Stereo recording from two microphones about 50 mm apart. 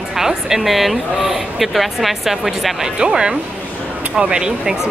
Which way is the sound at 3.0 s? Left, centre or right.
Centre.